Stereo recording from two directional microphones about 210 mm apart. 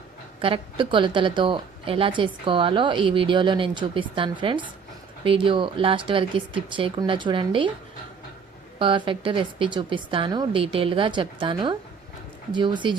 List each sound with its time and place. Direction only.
0.4 s a woman's voice: 25° right (ahead or behind)
8.8 s a woman's voice: 25° right (ahead or behind)